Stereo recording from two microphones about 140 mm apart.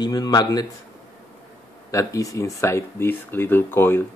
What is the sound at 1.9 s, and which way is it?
Speech, 25° left (ahead or behind).